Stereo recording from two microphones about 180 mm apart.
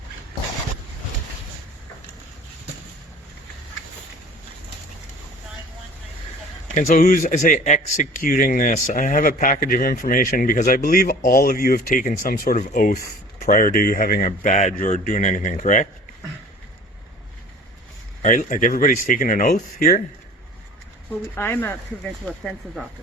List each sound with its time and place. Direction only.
6.7 s a man's voice: 45° left (ahead or behind)
18.2 s a man's voice: 45° left (ahead or behind)
21.3 s speech: 10° left (ahead or behind)